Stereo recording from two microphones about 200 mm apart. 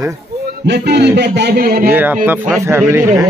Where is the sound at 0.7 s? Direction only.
55° right (ahead or behind).